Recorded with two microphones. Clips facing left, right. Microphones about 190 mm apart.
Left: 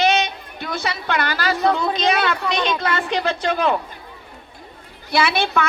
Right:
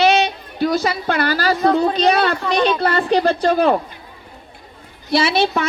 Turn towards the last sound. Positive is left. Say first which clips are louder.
# right 3 dB
turn(degrees=-30)  # may be behind; listen again after turning